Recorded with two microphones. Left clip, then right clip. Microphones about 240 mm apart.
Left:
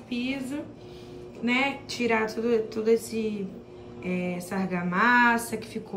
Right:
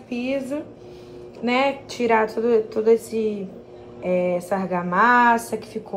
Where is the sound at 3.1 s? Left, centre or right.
Centre.